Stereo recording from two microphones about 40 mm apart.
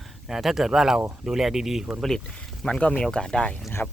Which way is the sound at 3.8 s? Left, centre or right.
Left.